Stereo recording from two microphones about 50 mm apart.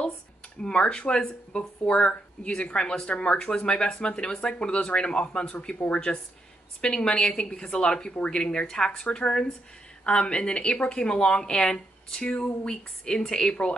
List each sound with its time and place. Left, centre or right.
0.6 s speech: centre